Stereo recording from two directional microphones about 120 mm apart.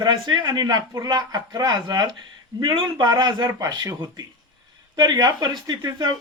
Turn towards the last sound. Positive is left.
turn(degrees=-35)  # may be behind; listen again after turning